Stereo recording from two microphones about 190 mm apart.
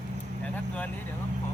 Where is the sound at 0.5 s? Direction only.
10° left (ahead or behind).